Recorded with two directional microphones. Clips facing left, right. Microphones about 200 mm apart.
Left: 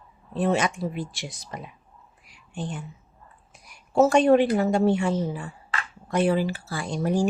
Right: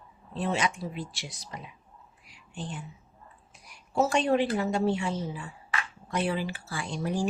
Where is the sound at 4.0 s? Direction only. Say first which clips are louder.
Left 7 dB; 50° left (ahead or behind).